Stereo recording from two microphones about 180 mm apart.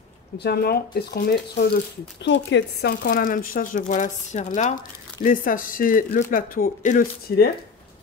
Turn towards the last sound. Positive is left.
turn(degrees=55)  # may be behind; listen again after turning